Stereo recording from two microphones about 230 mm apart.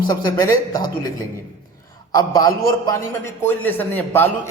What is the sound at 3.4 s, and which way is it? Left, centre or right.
Speech, centre.